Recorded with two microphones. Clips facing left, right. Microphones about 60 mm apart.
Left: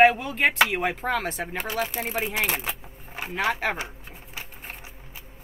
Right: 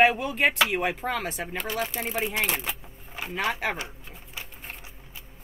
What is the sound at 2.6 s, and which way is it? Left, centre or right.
Keys jangling, left.